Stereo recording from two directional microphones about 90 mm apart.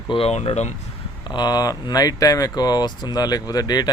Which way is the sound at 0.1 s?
90° left.